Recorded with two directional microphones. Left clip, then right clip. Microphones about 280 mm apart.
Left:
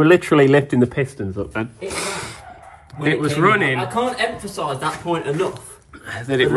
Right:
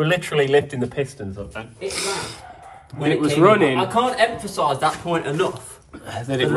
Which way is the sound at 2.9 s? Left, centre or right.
Centre.